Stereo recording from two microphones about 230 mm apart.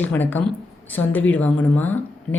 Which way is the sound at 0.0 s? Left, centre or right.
Centre.